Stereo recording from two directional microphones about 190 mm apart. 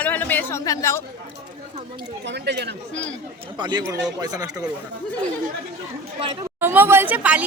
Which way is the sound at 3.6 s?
20° right (ahead or behind).